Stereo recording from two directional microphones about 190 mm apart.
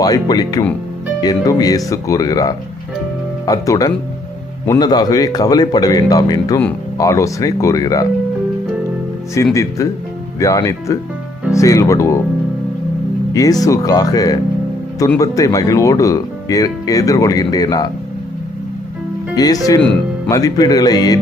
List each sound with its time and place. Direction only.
0.0 s speech: 20° left (ahead or behind)
9.3 s speech: 15° left (ahead or behind)
13.3 s speech: 20° left (ahead or behind)
19.4 s speech: 20° left (ahead or behind)